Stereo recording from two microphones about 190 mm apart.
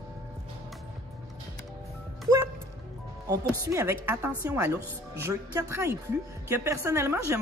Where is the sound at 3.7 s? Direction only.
15° right (ahead or behind).